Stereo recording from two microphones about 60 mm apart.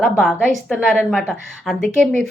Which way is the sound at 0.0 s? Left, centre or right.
Centre.